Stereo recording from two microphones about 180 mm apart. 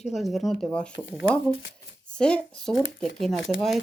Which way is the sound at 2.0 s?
5° left (ahead or behind).